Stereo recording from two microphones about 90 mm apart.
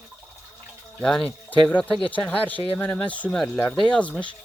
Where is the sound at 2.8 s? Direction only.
15° left (ahead or behind).